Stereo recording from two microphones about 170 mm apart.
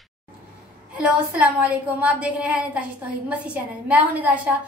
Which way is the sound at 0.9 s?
5° right (ahead or behind).